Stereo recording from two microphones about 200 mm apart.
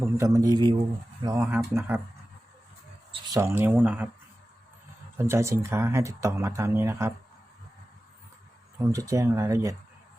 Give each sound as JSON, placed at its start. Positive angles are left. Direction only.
{"t": 0.0, "sound": "speech", "side_deg": -15}
{"t": 3.1, "sound": "a sound", "side_deg": -25}
{"t": 3.4, "sound": "speech", "side_deg": -10}
{"t": 5.1, "sound": "speech", "side_deg": -15}
{"t": 8.9, "sound": "speech", "side_deg": -15}